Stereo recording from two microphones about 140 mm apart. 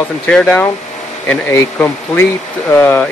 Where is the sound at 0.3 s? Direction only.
10° left (ahead or behind).